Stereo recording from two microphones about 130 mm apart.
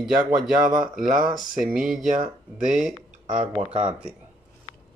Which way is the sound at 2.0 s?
80° right.